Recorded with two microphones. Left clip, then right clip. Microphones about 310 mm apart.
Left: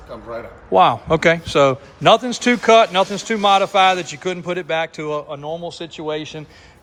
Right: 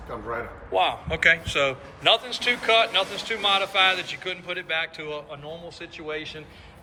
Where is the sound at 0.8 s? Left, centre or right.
Left.